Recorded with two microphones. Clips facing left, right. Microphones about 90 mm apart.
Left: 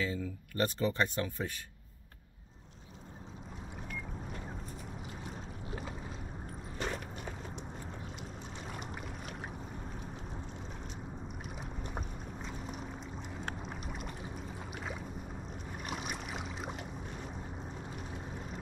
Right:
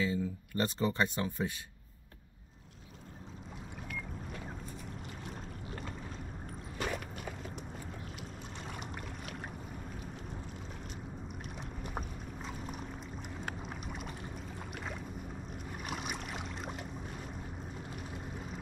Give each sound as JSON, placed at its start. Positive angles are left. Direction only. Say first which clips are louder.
{"t": 0.0, "sound": "speech", "louder": "right 3 dB", "side_deg": -20}
{"t": 5.2, "sound": "boat", "louder": "even", "side_deg": 0}
{"t": 6.8, "sound": "a sound", "louder": "right 1 dB", "side_deg": 0}
{"t": 12.4, "sound": "pour", "louder": "right 1 dB", "side_deg": 0}
{"t": 13.5, "sound": "boat", "louder": "even", "side_deg": 0}
{"t": 15.8, "sound": "boat", "louder": "even", "side_deg": 0}
{"t": 17.9, "sound": "vehicle", "louder": "even", "side_deg": 0}